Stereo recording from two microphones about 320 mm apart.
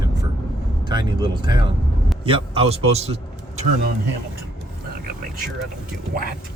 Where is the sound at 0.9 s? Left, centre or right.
Centre.